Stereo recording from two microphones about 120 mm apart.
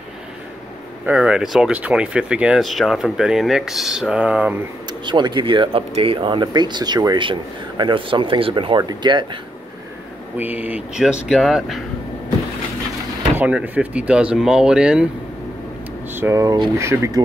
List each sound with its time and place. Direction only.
1.0 s speech: 10° right (ahead or behind)
5.0 s speech: 40° right (ahead or behind)
10.3 s speech: 15° right (ahead or behind)
13.4 s speech: 10° right (ahead or behind)
16.1 s speech: 20° right (ahead or behind)